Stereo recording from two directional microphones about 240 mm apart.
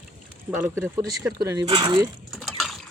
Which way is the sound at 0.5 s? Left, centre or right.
Centre.